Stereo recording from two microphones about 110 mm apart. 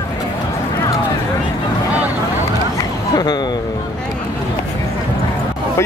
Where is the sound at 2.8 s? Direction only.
35° left (ahead or behind).